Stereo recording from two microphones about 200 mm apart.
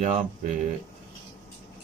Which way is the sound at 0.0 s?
35° right (ahead or behind).